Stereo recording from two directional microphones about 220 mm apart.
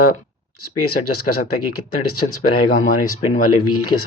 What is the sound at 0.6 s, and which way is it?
Speech, 90° left.